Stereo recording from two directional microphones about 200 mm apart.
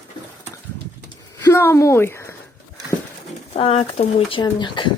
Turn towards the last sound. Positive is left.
turn(degrees=25)  # may be behind; listen again after turning